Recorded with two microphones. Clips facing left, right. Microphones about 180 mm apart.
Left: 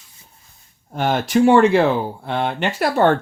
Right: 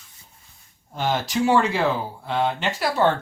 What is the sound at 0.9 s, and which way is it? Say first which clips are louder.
Speech: left 6 dB; 55° left (ahead or behind).